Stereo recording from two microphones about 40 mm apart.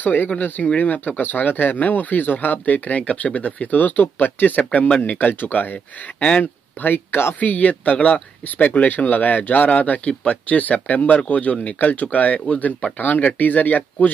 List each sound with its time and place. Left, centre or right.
0.0 s speech: left
6.1 s speech: left
6.8 s speech: left
7.1 s speech: left
7.3 s speech: left